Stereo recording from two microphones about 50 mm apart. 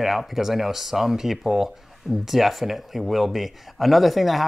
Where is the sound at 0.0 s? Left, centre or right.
Centre.